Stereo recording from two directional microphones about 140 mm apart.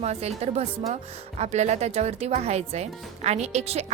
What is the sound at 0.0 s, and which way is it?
Speech, 50° right (ahead or behind).